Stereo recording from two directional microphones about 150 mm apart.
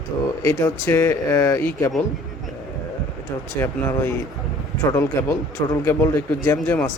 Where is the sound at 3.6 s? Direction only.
15° left (ahead or behind).